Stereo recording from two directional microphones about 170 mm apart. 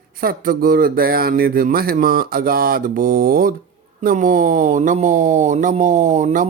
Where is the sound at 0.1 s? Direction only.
60° right (ahead or behind).